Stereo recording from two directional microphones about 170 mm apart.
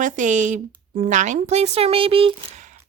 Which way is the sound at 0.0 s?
45° right (ahead or behind).